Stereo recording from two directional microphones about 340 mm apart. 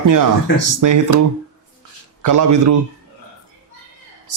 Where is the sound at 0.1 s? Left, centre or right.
Right.